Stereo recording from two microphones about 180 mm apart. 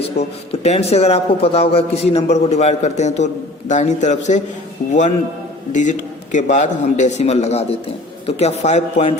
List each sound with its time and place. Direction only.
0.0 s a man's voice: 35° left (ahead or behind)
6.3 s a man's voice: 45° left (ahead or behind)